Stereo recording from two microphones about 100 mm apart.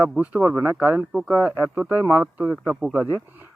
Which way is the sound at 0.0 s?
10° right (ahead or behind).